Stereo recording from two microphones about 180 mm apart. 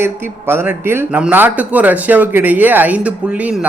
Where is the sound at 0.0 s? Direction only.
15° right (ahead or behind).